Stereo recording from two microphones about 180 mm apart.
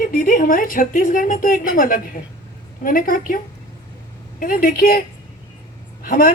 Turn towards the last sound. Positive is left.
turn(degrees=50)  # may be behind; listen again after turning